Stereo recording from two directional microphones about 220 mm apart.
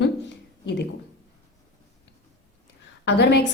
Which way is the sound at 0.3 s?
50° left (ahead or behind).